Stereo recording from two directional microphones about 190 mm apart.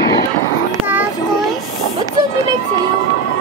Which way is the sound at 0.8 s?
10° right (ahead or behind).